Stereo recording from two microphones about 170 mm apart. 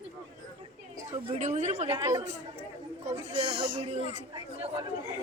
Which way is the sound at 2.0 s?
20° right (ahead or behind).